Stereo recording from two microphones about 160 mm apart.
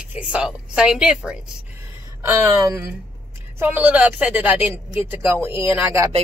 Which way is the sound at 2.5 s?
20° right (ahead or behind).